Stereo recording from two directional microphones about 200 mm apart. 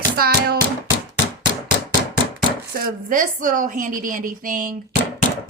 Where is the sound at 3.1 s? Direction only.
40° right (ahead or behind).